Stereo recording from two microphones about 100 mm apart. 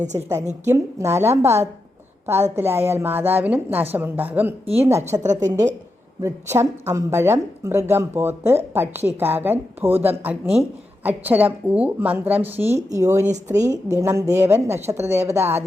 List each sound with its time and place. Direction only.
0.3 s a woman's voice: 30° right (ahead or behind)
10.4 s speech: 10° right (ahead or behind)
12.9 s a woman's voice: 30° right (ahead or behind)